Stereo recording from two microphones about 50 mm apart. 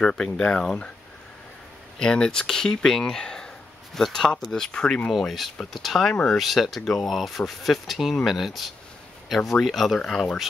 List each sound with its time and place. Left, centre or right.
0.0 s speech: centre
2.0 s speech: centre
4.6 s speech: centre
5.7 s speech: centre